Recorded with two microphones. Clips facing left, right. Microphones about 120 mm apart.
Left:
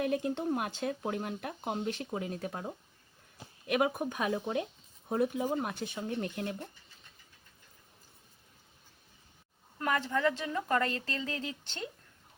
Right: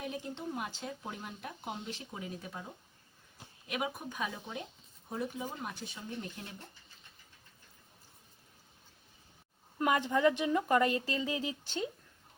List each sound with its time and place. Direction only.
0.0 s speech: 60° left (ahead or behind)
9.7 s speech: 15° right (ahead or behind)